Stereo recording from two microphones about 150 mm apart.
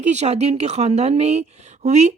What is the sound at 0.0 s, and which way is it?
Speech, 50° right (ahead or behind).